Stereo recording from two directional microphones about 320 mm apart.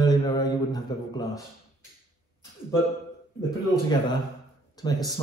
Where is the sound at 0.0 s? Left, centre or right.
Centre.